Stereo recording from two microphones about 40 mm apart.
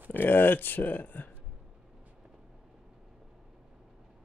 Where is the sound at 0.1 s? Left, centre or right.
Left.